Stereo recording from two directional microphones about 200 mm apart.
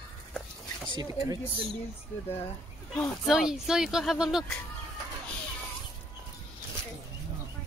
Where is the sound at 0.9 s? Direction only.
20° right (ahead or behind).